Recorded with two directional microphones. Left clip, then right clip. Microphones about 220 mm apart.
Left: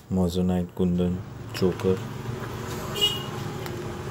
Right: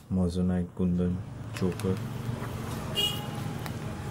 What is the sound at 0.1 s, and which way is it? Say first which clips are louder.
Speech: left 5 dB; 10° left (ahead or behind).